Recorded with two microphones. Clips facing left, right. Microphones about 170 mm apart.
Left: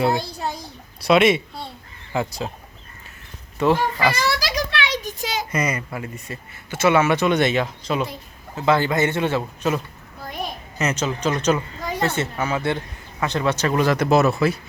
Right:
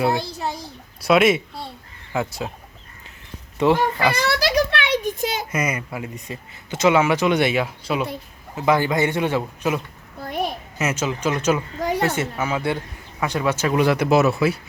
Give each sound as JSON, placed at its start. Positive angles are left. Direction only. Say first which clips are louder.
{"t": 0.0, "sound": "speech", "louder": "even", "side_deg": 0}
{"t": 3.6, "sound": "speech", "louder": "right 1 dB", "side_deg": -15}
{"t": 4.1, "sound": "a sound", "louder": "right 3 dB", "side_deg": -60}
{"t": 5.5, "sound": "speech", "louder": "even", "side_deg": -10}